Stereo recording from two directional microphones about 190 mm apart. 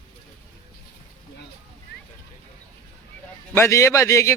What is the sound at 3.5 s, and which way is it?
Speech, 15° left (ahead or behind).